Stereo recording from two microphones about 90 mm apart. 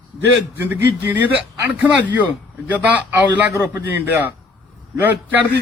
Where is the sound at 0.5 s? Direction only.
25° right (ahead or behind).